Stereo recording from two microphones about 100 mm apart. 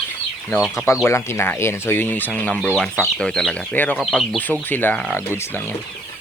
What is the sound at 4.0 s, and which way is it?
Speech, centre (ahead or behind).